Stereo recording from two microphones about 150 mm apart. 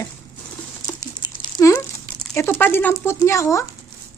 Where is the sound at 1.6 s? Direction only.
20° left (ahead or behind).